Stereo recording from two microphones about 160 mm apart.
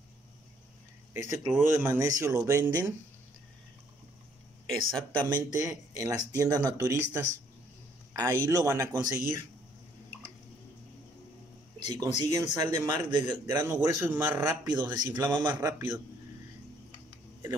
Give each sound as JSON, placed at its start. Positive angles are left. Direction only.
{"t": 1.1, "sound": "speech", "side_deg": -15}
{"t": 4.6, "sound": "speech", "side_deg": 5}
{"t": 5.3, "sound": "a man's voice", "side_deg": -20}
{"t": 11.8, "sound": "a man's voice", "side_deg": -25}